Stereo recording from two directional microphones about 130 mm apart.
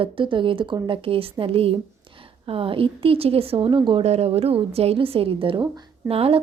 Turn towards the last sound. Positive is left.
turn(degrees=-45)  # may be behind; listen again after turning